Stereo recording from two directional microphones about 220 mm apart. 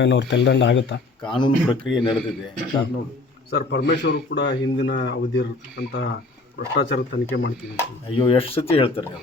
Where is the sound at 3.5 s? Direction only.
50° left (ahead or behind).